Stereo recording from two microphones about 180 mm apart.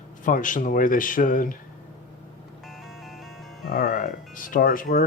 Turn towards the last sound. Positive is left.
turn(degrees=50)  # may be behind; listen again after turning